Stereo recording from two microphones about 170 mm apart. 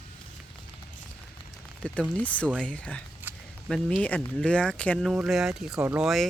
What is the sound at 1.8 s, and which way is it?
Speech, 5° left (ahead or behind).